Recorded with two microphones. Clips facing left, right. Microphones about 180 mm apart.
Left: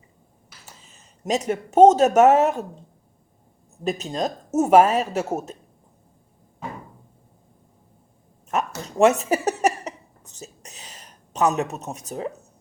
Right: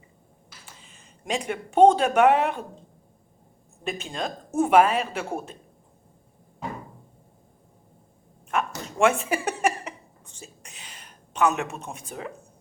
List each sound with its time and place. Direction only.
0.6 s speech: 40° left (ahead or behind)
3.8 s a woman's voice: 40° left (ahead or behind)
8.4 s a sound: 40° left (ahead or behind)